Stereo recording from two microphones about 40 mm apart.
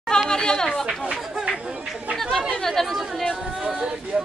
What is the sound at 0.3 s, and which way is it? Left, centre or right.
Speech, centre.